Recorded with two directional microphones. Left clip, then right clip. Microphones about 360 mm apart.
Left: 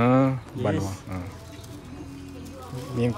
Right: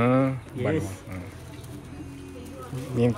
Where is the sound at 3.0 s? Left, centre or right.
Centre.